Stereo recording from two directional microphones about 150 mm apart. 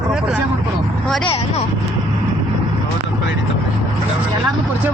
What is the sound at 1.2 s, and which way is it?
Speech, 40° left (ahead or behind).